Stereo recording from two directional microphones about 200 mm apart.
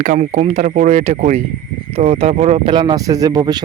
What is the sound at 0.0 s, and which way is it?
Speech, 40° right (ahead or behind).